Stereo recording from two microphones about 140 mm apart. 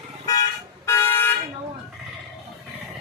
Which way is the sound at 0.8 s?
15° left (ahead or behind).